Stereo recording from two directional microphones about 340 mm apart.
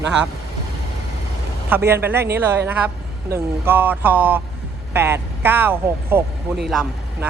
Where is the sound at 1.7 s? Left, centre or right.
Centre.